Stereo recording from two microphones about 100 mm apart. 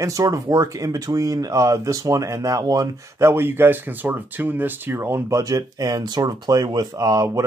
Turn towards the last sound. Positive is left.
turn(degrees=-35)  # may be behind; listen again after turning